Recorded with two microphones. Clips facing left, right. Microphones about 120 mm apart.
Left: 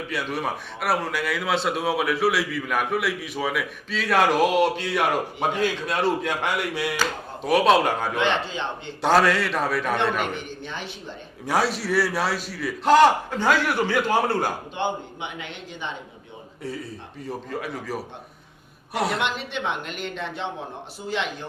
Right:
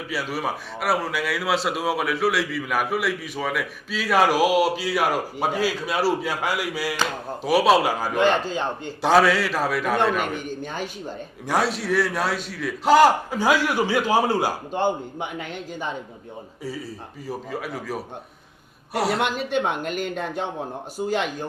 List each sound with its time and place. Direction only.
0.1 s a man's voice: 5° right (ahead or behind)
8.2 s a man's voice: 40° right (ahead or behind)
9.0 s a man's voice: centre (ahead or behind)
10.3 s a woman's voice: 45° right (ahead or behind)
11.4 s a man's voice: centre (ahead or behind)
14.7 s a woman's voice: 40° right (ahead or behind)
17.2 s a man's voice: centre (ahead or behind)
19.2 s a woman's voice: 45° right (ahead or behind)